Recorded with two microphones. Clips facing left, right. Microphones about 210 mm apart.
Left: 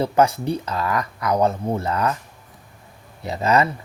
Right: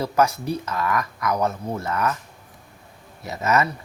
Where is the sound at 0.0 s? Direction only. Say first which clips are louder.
Left 3 dB; 30° left (ahead or behind).